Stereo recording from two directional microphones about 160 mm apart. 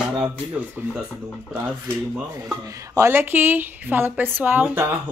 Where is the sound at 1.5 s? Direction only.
10° right (ahead or behind).